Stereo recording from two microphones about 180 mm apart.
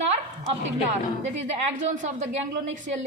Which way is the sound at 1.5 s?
40° right (ahead or behind).